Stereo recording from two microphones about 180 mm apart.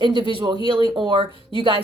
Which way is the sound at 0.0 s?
25° right (ahead or behind).